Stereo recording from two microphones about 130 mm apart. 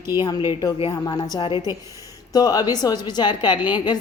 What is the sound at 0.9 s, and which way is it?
A woman's voice, 35° left (ahead or behind).